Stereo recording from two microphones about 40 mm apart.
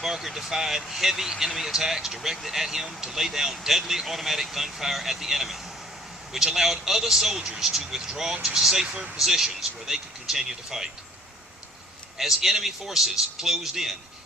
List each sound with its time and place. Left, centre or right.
0.0 s speech: centre
7.4 s speech: centre
12.1 s speech: centre